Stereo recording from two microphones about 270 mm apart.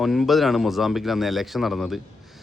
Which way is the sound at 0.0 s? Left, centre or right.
Centre.